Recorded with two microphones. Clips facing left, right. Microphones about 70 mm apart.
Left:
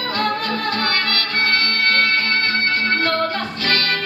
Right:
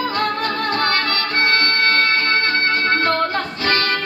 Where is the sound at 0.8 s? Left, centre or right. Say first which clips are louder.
Right 2 dB; right.